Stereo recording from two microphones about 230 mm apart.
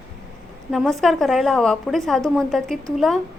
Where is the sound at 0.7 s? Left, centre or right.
Centre.